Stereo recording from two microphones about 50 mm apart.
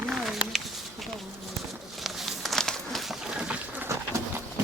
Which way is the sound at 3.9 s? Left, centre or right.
Right.